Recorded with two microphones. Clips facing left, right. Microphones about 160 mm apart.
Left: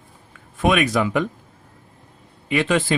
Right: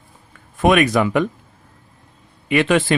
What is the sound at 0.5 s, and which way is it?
Speech, 55° right (ahead or behind).